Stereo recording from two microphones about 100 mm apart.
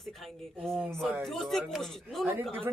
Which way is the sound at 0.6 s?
Centre (ahead or behind).